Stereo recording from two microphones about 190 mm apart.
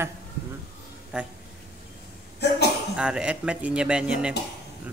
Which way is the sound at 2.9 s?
5° right (ahead or behind).